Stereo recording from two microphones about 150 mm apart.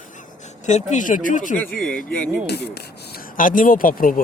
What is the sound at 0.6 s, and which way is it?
Speech, 50° left (ahead or behind).